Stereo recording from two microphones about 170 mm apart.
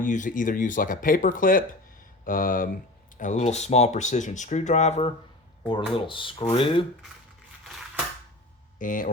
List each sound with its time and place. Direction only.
0.0 s speech: 50° left (ahead or behind); by 6.8 s 30° left (ahead or behind)
8.8 s speech: 55° left (ahead or behind)